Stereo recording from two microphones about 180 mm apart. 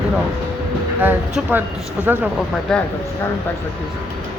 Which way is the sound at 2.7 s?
5° left (ahead or behind).